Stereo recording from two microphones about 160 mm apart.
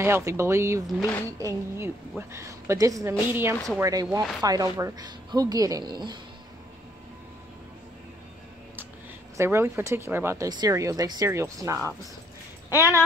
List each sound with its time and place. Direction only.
0.0 s speech: 15° right (ahead or behind)
9.4 s speech: 15° right (ahead or behind)
12.6 s speech: 20° left (ahead or behind)